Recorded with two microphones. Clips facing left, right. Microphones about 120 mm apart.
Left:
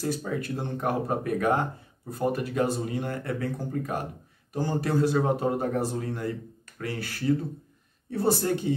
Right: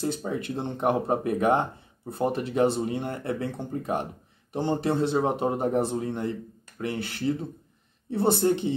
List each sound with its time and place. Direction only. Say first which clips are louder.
0.0 s speech: right 1 dB; 25° right (ahead or behind)